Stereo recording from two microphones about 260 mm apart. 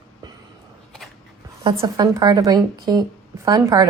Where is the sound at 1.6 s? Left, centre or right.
Centre.